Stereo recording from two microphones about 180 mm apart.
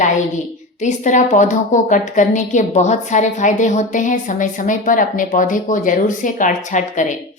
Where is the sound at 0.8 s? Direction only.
40° left (ahead or behind).